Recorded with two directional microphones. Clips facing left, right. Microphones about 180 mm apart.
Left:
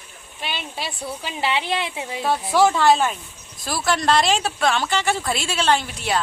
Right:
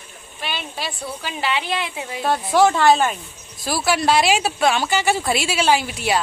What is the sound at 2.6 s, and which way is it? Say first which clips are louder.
A woman's voice: right 2 dB; centre (ahead or behind).